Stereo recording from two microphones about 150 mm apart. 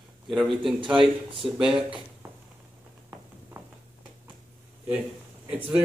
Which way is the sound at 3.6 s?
15° right (ahead or behind).